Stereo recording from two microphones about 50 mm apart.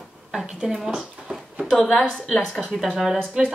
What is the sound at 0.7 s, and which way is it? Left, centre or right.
Speech, centre.